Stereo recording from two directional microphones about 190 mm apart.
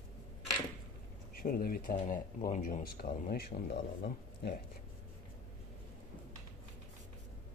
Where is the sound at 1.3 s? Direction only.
50° left (ahead or behind).